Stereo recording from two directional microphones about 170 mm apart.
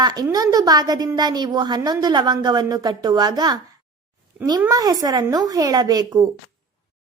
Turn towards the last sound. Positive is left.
turn(degrees=-20)  # may be behind; listen again after turning